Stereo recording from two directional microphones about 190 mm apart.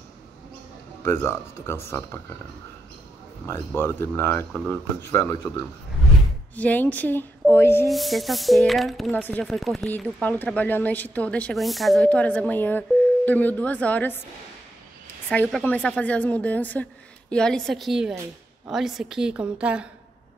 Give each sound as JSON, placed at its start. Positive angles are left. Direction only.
{"t": 1.0, "sound": "a woman's voice", "side_deg": 15}
{"t": 3.4, "sound": "a woman's voice", "side_deg": 10}
{"t": 7.9, "sound": "a woman's voice", "side_deg": 0}
{"t": 15.4, "sound": "speech", "side_deg": -5}
{"t": 15.7, "sound": "a woman's voice", "side_deg": 5}